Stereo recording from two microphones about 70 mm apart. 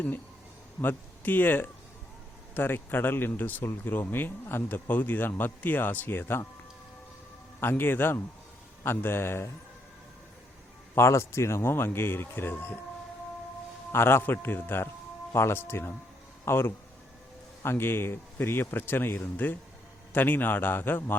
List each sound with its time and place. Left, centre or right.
0.8 s speech: left
7.6 s speech: left
10.9 s speech: left
13.9 s speech: left